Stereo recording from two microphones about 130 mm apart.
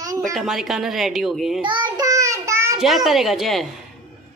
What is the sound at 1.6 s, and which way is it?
Child singing, 35° right (ahead or behind).